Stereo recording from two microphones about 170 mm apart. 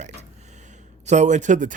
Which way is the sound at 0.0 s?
45° right (ahead or behind).